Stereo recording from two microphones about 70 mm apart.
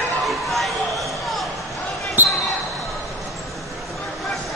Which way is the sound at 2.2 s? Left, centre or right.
Right.